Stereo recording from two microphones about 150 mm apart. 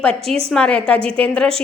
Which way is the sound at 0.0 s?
5° left (ahead or behind).